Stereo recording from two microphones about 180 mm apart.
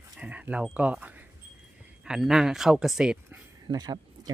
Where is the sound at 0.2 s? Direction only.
10° right (ahead or behind).